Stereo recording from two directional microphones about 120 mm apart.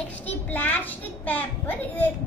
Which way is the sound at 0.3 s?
15° left (ahead or behind).